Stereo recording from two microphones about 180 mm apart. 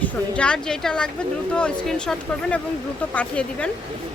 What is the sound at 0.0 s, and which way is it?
Speech, 5° left (ahead or behind).